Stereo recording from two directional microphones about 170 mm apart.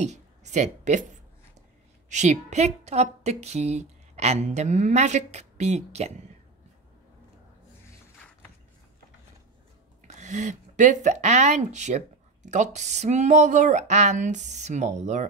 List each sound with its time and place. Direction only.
0.0 s speech: 45° right (ahead or behind)
2.0 s a woman's voice: 45° right (ahead or behind)
7.9 s a sound: 10° left (ahead or behind)
10.0 s speech: 45° right (ahead or behind)